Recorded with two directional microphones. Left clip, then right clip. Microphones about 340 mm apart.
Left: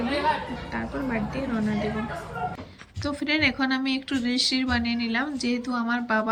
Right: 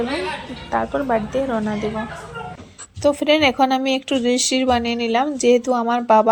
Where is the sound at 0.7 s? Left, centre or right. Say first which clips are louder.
Right 12 dB; right.